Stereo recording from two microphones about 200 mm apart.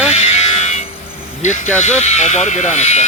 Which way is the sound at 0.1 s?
35° left (ahead or behind).